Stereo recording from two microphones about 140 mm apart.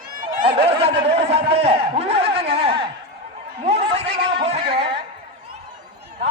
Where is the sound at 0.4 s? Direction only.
45° right (ahead or behind).